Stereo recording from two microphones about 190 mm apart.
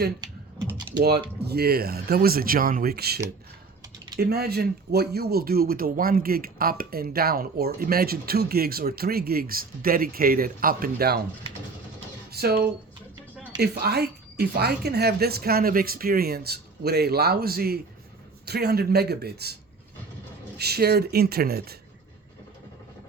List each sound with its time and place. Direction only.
0.2 s typing: 20° right (ahead or behind)
1.0 s a woman's voice: 55° right (ahead or behind)
4.2 s speech: 55° right (ahead or behind)
12.3 s a woman's voice: 55° right (ahead or behind)
20.6 s a woman's voice: 55° right (ahead or behind)